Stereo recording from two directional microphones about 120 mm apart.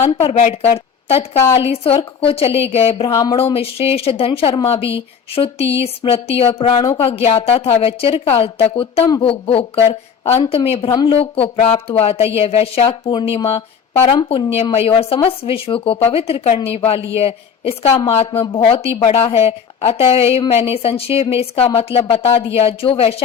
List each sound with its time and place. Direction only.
0.0 s a woman's voice: 55° left (ahead or behind)
0.3 s a woman's voice: 70° left (ahead or behind)
3.1 s speech: 35° left (ahead or behind)
3.3 s a woman's voice: 55° left (ahead or behind)
14.6 s a woman's voice: 55° left (ahead or behind)